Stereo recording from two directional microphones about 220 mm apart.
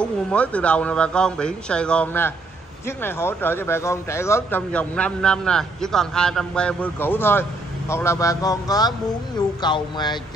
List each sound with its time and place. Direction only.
0.0 s a man's voice: 5° left (ahead or behind)